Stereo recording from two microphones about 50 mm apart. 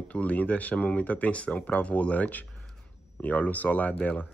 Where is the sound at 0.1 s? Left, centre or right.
Left.